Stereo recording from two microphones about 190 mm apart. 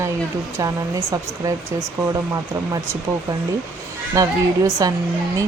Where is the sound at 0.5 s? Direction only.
15° right (ahead or behind).